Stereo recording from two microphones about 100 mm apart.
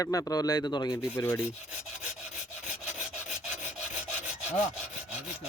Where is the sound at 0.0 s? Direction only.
30° left (ahead or behind).